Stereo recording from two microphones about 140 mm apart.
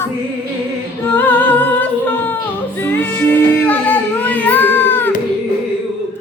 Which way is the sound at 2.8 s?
15° left (ahead or behind).